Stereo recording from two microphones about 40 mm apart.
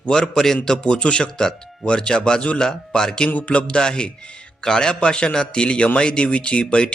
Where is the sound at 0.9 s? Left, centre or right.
Left.